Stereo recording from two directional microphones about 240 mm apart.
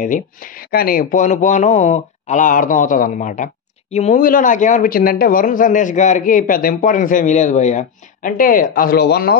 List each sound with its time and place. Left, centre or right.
0.7 s speech: left